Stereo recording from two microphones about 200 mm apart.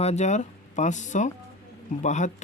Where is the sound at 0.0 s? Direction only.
35° left (ahead or behind).